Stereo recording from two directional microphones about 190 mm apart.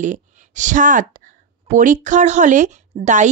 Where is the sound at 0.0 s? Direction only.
40° right (ahead or behind).